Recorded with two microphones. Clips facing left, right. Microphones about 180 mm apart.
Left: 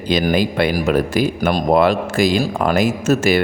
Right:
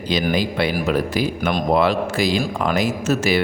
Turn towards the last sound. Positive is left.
turn(degrees=50)  # may be behind; listen again after turning